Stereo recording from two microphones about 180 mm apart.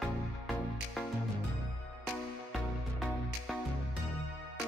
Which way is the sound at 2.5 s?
Centre (ahead or behind).